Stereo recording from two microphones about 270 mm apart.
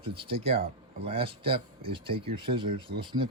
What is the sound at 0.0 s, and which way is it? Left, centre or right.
Speech, centre.